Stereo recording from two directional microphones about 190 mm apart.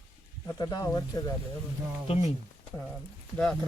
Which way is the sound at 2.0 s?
30° left (ahead or behind).